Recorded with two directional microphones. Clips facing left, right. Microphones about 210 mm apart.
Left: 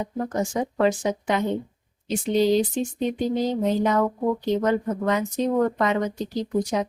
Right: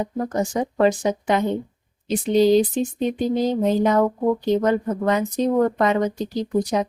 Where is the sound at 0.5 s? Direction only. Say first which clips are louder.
Right 3 dB; 40° right (ahead or behind).